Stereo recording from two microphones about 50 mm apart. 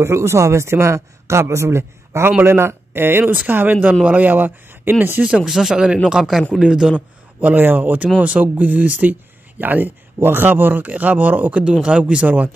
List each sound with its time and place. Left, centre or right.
0.0 s a man's voice: right
3.3 s speech: right
5.5 s speech: centre
7.3 s speech: right
11.6 s speech: centre